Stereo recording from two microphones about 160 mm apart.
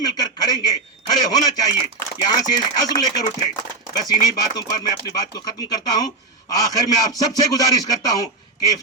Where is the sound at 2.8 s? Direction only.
25° left (ahead or behind).